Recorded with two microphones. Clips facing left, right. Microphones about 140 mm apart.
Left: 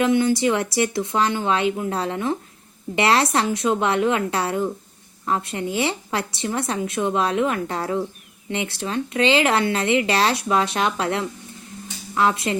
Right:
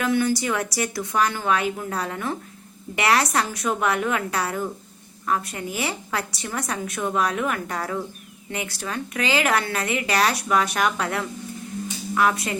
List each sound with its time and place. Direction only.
0.0 s a woman's voice: 20° left (ahead or behind)